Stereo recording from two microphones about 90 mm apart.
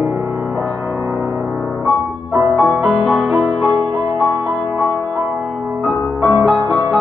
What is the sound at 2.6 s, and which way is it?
Music, 5° right (ahead or behind).